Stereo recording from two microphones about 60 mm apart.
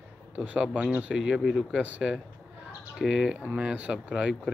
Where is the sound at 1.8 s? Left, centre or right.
Right.